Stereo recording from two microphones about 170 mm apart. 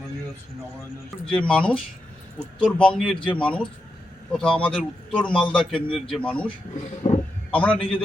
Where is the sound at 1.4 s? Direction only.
5° left (ahead or behind).